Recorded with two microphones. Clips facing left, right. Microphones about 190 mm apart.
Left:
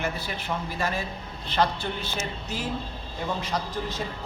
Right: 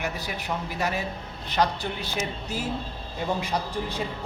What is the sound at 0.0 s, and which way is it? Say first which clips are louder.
A man's voice: left 1 dB; 15° right (ahead or behind).